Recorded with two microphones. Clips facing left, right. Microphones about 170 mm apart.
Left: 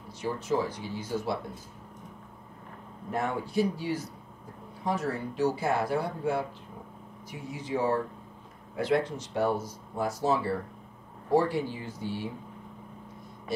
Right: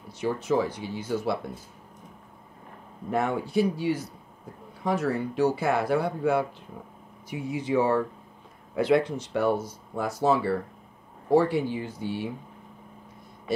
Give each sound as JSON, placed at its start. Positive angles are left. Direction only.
{"t": 0.2, "sound": "speech", "side_deg": -65}
{"t": 3.1, "sound": "speech", "side_deg": -70}